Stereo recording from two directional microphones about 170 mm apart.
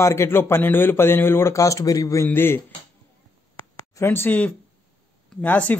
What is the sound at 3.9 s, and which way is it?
A man's voice, 15° left (ahead or behind).